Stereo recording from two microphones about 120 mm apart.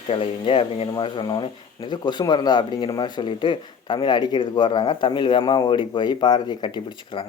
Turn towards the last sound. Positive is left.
turn(degrees=40)  # may be behind; listen again after turning